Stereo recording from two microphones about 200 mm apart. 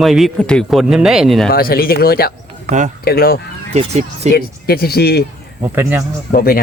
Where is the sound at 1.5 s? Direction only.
50° left (ahead or behind).